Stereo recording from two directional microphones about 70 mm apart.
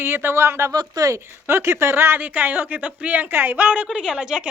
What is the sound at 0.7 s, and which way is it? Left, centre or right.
Speech, right.